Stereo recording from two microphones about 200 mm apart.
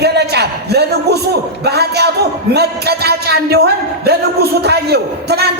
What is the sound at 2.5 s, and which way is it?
Speech, 55° right (ahead or behind).